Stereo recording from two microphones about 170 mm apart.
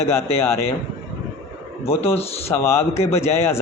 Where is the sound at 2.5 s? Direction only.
15° left (ahead or behind).